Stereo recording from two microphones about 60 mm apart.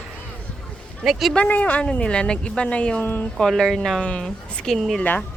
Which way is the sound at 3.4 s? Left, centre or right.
Centre.